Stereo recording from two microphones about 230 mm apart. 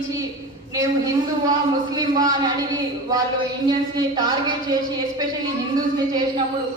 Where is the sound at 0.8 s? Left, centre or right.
Centre.